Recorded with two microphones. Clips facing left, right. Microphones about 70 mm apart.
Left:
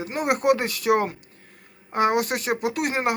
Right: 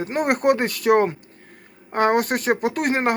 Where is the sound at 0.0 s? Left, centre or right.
Right.